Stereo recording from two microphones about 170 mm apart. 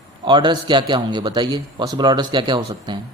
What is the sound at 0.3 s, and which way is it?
A man's voice, 25° right (ahead or behind).